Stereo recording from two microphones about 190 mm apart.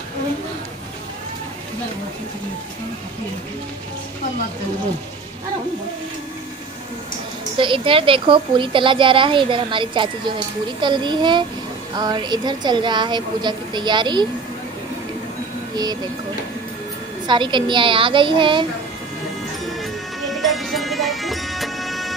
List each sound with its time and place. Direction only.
7.5 s a woman's voice: 25° right (ahead or behind)
15.7 s speech: 20° right (ahead or behind)
17.3 s a woman's voice: 25° right (ahead or behind)
19.6 s music: centre (ahead or behind)